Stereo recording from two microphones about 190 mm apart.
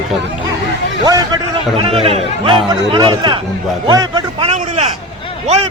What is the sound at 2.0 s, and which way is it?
Speech, 30° right (ahead or behind).